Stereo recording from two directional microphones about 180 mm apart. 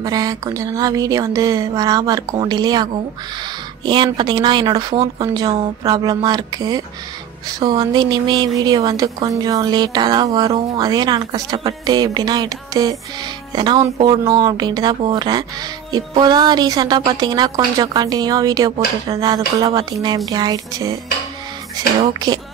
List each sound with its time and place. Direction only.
0.0 s a woman's voice: 20° right (ahead or behind)